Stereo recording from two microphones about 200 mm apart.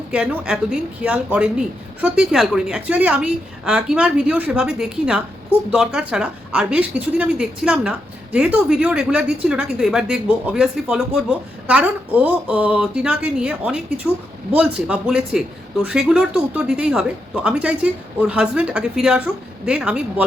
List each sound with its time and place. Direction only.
0.1 s a woman's voice: 5° right (ahead or behind)